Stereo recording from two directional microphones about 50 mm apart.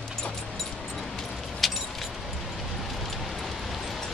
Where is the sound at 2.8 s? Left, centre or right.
Centre.